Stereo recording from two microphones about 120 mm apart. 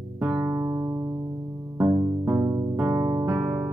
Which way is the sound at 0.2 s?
20° right (ahead or behind).